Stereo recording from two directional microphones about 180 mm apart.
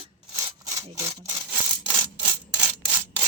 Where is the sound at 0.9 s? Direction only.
20° right (ahead or behind).